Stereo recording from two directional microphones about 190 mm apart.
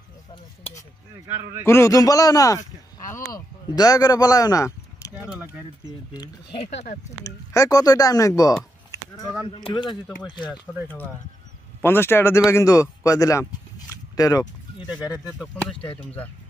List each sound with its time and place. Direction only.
1.7 s a man's voice: 15° left (ahead or behind)
5.3 s a sound: 10° right (ahead or behind)
6.1 s speech: 20° left (ahead or behind)
6.6 s speech: 35° left (ahead or behind)
7.2 s speech: 15° left (ahead or behind)
8.9 s a sound: 15° left (ahead or behind)
9.7 s speech: 25° left (ahead or behind)
11.8 s a man's voice: 10° left (ahead or behind)
13.0 s a sound: 15° left (ahead or behind)
14.9 s speech: 5° right (ahead or behind)
15.8 s speech: 30° left (ahead or behind)